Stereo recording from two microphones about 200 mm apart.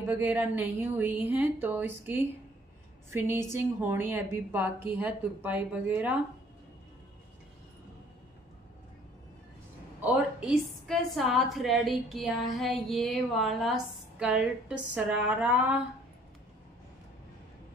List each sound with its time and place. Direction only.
0.0 s a woman's voice: 10° right (ahead or behind)
3.1 s a woman's voice: 15° right (ahead or behind)
10.0 s a woman's voice: 5° right (ahead or behind)